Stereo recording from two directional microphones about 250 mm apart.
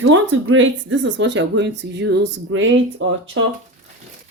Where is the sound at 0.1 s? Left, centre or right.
Right.